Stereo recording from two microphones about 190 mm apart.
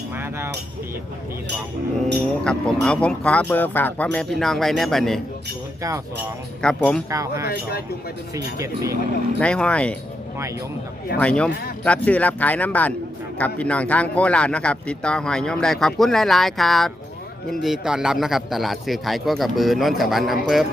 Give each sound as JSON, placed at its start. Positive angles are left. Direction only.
{"t": 0.2, "sound": "a sound", "side_deg": -10}
{"t": 2.4, "sound": "speech", "side_deg": 5}
{"t": 6.6, "sound": "speech", "side_deg": 5}
{"t": 7.1, "sound": "speech", "side_deg": -15}
{"t": 7.4, "sound": "speech", "side_deg": 55}
{"t": 8.5, "sound": "speech", "side_deg": -15}
{"t": 9.4, "sound": "speech", "side_deg": 5}
{"t": 11.2, "sound": "speech", "side_deg": 5}